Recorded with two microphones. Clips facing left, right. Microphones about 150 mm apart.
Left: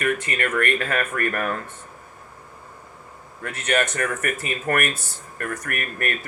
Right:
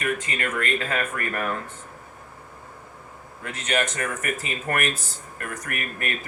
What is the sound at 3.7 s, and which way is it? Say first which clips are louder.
Speech: left 3 dB; 20° right (ahead or behind).